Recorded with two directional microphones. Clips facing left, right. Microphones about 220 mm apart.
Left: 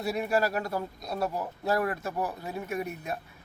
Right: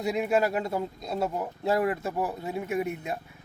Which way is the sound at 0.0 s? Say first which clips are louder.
Right 2 dB; 20° right (ahead or behind).